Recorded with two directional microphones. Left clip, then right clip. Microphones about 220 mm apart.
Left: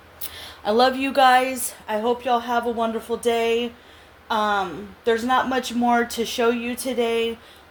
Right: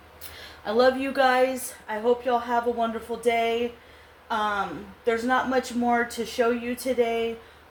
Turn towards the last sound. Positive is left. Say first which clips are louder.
# left 2 dB
turn(degrees=45)  # may be behind; listen again after turning